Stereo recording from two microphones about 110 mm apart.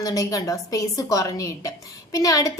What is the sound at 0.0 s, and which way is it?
A woman's voice, 35° left (ahead or behind).